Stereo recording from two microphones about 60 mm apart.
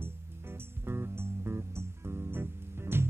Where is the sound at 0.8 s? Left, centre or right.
Right.